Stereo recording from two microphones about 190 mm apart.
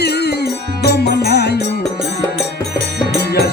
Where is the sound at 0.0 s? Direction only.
60° left (ahead or behind).